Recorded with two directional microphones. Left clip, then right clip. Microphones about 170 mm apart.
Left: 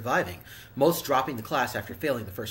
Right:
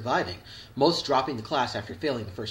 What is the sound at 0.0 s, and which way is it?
Speech, 20° left (ahead or behind).